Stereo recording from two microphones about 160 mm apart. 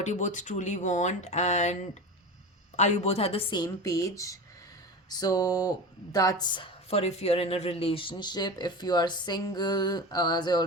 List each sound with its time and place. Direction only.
0.0 s speech: 50° left (ahead or behind)
2.7 s speech: 45° left (ahead or behind); by 10.6 s 25° left (ahead or behind)